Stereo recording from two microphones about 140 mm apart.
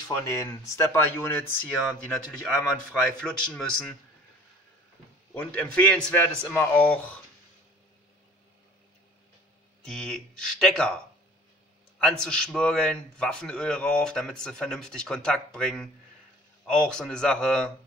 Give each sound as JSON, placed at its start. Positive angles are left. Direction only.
{"t": 0.1, "sound": "a man's voice", "side_deg": 20}
{"t": 1.9, "sound": "a man's voice", "side_deg": 0}
{"t": 5.3, "sound": "a man's voice", "side_deg": 5}
{"t": 9.8, "sound": "a man's voice", "side_deg": 5}
{"t": 12.0, "sound": "a man's voice", "side_deg": 5}